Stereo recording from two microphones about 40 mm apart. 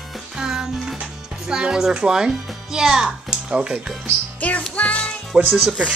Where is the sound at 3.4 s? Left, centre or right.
Right.